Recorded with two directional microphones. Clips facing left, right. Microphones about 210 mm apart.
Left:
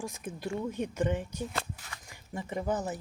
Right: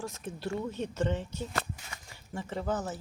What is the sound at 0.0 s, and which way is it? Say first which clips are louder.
Speech: even; 10° left (ahead or behind).